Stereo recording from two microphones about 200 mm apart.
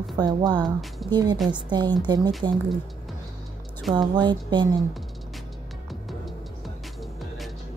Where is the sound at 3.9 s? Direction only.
20° right (ahead or behind).